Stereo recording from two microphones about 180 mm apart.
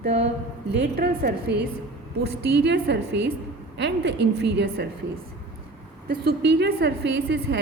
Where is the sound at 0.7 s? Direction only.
65° right (ahead or behind).